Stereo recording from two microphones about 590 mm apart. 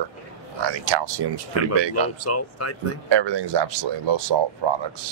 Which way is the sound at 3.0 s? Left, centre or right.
Right.